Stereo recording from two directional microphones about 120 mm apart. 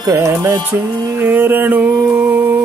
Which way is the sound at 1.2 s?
15° right (ahead or behind).